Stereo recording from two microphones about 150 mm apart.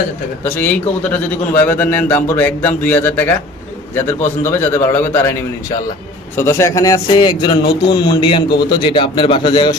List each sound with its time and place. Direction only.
1.5 s a man's voice: 10° left (ahead or behind)
6.3 s a man's voice: 15° left (ahead or behind)